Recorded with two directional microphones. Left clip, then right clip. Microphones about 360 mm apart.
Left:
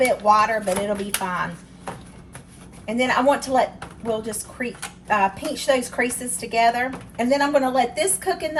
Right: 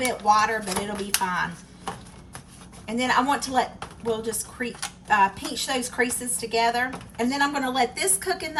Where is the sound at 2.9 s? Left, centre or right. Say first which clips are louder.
Left 4 dB; centre.